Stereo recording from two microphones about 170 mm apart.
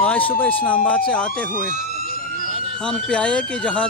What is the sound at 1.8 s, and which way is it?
Police car, 60° left (ahead or behind).